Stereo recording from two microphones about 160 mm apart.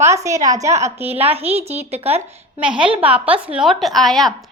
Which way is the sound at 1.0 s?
40° right (ahead or behind).